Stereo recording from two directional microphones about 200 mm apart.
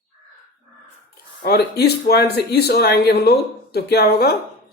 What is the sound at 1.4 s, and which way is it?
A woman's voice, 55° left (ahead or behind).